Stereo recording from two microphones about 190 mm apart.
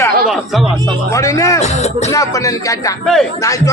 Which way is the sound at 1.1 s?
15° left (ahead or behind).